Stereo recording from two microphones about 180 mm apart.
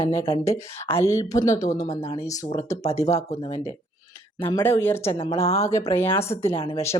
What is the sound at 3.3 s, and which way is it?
Speech, 35° left (ahead or behind).